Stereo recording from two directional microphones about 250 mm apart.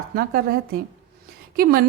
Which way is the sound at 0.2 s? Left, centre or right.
Right.